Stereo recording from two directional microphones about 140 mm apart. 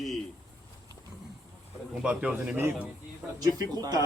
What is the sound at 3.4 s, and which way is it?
Speech, 25° right (ahead or behind).